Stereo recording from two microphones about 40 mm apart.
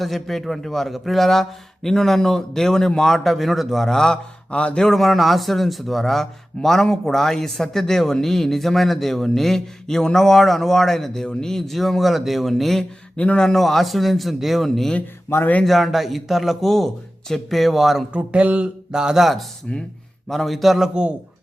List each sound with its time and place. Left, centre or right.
0.0 s a man's voice: centre
3.9 s speech: centre
4.5 s speech: left
4.8 s a man's voice: centre
13.1 s a man's voice: left
13.4 s a man's voice: centre
15.3 s a man's voice: left
15.6 s a man's voice: centre
18.1 s speech: right
18.9 s speech: centre
19.2 s a man's voice: centre
20.9 s a man's voice: right